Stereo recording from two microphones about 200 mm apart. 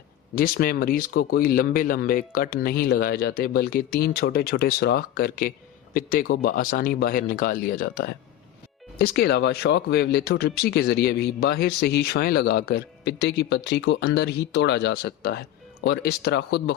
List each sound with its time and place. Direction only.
0.3 s speech: 50° left (ahead or behind)